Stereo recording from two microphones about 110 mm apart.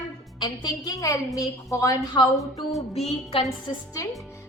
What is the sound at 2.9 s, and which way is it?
Speech, 65° left (ahead or behind).